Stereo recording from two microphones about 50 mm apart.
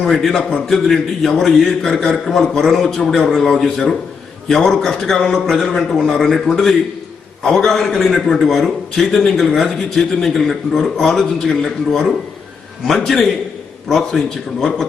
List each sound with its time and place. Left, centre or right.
0.0 s a man's voice: centre
14.3 s a man's voice: centre